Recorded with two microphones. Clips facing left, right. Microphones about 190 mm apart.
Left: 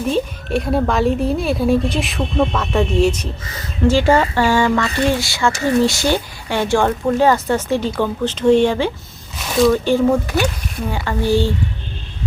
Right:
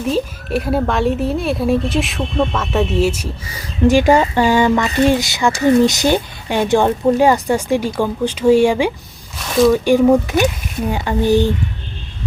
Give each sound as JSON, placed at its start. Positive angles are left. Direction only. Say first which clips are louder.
{"t": 0.1, "sound": "speech", "louder": "right 1 dB", "side_deg": -5}
{"t": 9.4, "sound": "speech", "louder": "right 2 dB", "side_deg": 0}
{"t": 9.7, "sound": "speech", "louder": "right 3 dB", "side_deg": -15}